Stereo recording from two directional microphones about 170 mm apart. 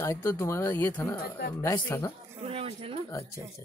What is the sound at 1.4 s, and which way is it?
Speech, 65° left (ahead or behind).